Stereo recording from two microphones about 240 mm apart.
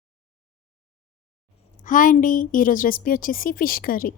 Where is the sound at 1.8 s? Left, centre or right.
Left.